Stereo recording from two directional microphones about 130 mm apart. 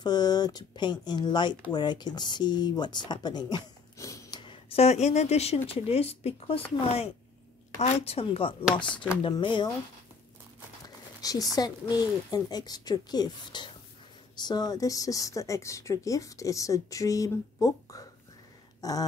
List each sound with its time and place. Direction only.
0.0 s speech: 30° left (ahead or behind)
4.4 s a woman's voice: 45° left (ahead or behind)
7.8 s a woman's voice: 50° left (ahead or behind)
11.1 s a sound: 30° left (ahead or behind)
11.5 s speech: 30° left (ahead or behind)
18.8 s a sound: 30° left (ahead or behind)